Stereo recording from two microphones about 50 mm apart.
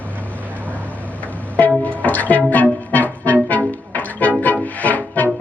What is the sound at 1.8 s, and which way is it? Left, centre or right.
Music, left.